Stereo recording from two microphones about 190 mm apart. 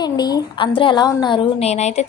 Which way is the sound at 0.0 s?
20° left (ahead or behind).